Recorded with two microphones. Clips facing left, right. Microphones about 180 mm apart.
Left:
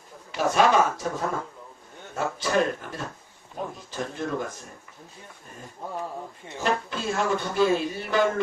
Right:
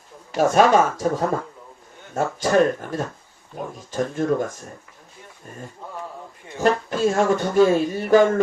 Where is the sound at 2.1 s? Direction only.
45° right (ahead or behind).